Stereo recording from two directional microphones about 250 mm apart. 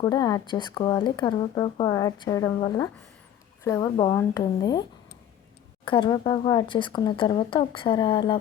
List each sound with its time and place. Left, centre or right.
0.0 s speech: centre